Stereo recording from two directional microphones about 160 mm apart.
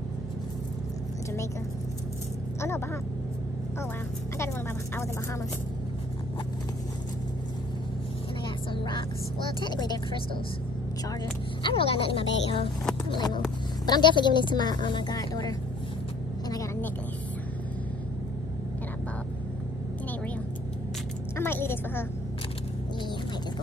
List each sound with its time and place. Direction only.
9.6 s a woman's voice: 25° left (ahead or behind)
11.6 s a woman's voice: 35° left (ahead or behind)
21.4 s a sound: 15° left (ahead or behind)